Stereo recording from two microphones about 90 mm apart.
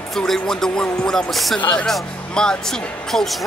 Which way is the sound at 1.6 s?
15° left (ahead or behind).